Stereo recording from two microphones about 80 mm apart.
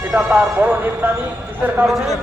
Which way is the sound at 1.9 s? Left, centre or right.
Centre.